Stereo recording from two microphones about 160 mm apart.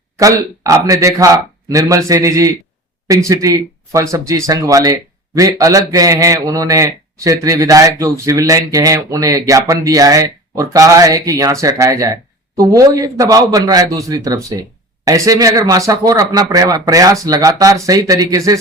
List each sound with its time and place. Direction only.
0.6 s speech: 20° right (ahead or behind)